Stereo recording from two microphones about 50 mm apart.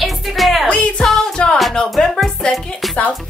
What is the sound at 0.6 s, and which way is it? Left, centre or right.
Music, left.